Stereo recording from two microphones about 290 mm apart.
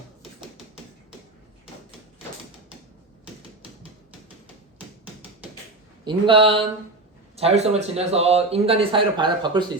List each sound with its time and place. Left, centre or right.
6.1 s a man's voice: centre